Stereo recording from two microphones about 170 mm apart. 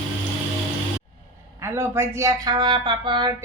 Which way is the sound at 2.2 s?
25° right (ahead or behind).